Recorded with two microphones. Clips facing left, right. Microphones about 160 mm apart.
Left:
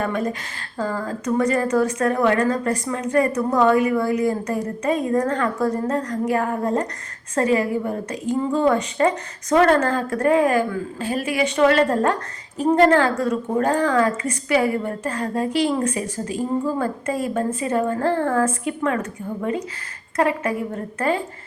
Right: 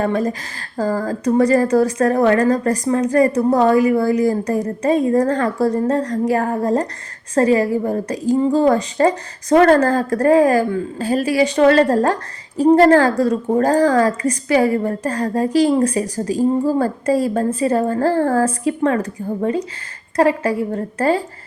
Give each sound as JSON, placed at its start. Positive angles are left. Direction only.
{"t": 0.0, "sound": "a woman's voice", "side_deg": -35}